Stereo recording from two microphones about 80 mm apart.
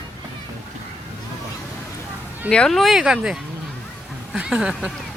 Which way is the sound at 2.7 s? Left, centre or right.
Centre.